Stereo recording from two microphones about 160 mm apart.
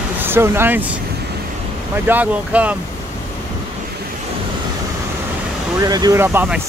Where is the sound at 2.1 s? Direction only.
10° right (ahead or behind).